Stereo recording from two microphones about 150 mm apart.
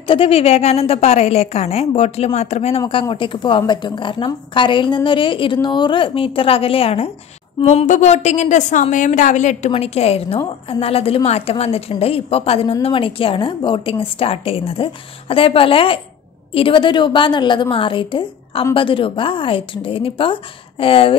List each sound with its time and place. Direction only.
0.0 s a woman's voice: 35° left (ahead or behind)
2.9 s a woman's voice: 35° left (ahead or behind)